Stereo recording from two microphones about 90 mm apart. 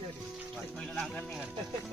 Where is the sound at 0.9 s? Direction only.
10° left (ahead or behind).